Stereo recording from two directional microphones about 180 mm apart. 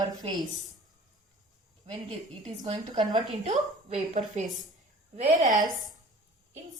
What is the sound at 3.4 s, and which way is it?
A woman's voice, 40° right (ahead or behind).